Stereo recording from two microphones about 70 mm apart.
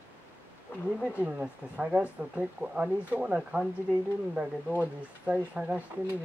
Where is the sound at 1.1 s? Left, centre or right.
Centre.